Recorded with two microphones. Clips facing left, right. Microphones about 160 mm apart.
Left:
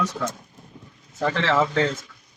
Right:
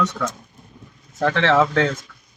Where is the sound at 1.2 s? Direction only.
90° right.